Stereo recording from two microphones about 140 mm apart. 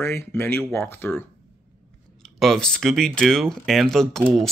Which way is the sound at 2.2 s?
Centre (ahead or behind).